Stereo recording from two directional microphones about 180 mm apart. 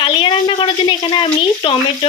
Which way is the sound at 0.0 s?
30° left (ahead or behind).